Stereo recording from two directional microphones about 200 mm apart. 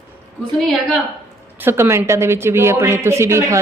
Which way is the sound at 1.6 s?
10° right (ahead or behind).